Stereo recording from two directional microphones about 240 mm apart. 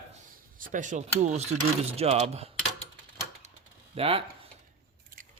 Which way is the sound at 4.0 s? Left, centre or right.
Right.